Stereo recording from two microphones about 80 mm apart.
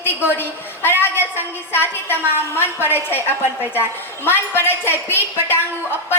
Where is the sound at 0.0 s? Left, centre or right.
Left.